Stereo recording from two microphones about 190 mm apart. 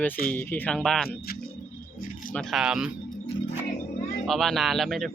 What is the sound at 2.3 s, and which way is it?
Speech, centre (ahead or behind).